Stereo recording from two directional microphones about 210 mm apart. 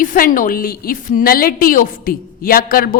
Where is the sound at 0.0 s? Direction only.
40° left (ahead or behind).